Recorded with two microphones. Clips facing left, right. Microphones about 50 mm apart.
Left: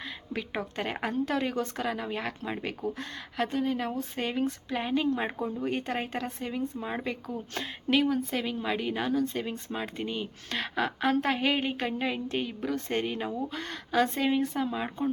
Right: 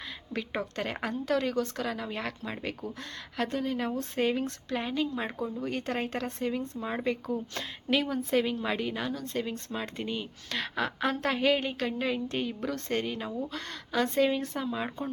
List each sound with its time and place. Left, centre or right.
0.0 s speech: centre
5.9 s speech: centre